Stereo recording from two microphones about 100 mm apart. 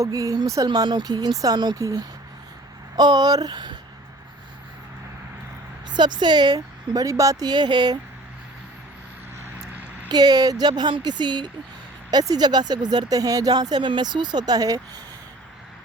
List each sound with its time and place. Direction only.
0.0 s speech: 35° right (ahead or behind)
5.9 s speech: 50° right (ahead or behind)
10.1 s speech: 45° right (ahead or behind)